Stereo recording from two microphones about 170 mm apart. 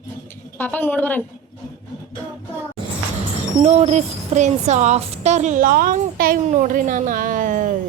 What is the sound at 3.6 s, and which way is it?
A woman's voice, 40° right (ahead or behind).